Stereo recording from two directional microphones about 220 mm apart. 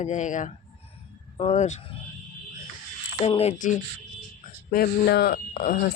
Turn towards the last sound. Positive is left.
turn(degrees=35)  # may be behind; listen again after turning